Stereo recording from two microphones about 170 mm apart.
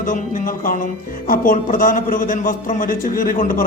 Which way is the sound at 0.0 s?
50° left (ahead or behind).